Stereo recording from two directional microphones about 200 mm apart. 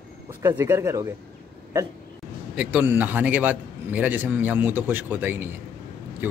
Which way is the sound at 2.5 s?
10° right (ahead or behind).